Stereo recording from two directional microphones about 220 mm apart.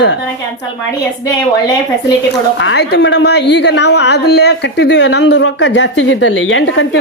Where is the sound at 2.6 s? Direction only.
50° left (ahead or behind).